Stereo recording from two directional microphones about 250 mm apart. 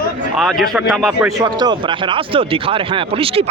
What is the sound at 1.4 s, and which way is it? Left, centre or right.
Speech, centre.